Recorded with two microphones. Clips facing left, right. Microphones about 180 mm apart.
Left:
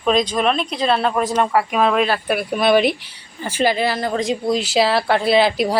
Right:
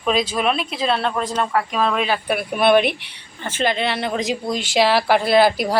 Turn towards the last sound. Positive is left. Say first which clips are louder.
# even
turn(degrees=0)  # may be behind; listen again after turning